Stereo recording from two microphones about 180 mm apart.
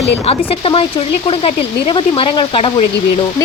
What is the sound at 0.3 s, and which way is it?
A woman's voice, 30° left (ahead or behind).